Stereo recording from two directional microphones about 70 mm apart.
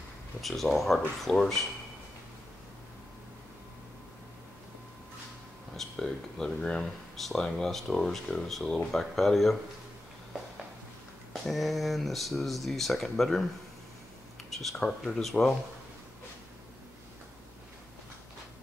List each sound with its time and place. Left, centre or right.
0.4 s speech: centre
5.8 s speech: centre
11.4 s speech: centre
14.5 s speech: centre